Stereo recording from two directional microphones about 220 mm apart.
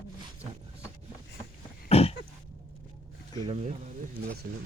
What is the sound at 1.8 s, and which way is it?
Throat clearing, 25° left (ahead or behind).